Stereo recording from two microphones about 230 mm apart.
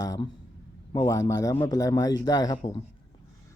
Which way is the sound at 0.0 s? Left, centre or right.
Centre.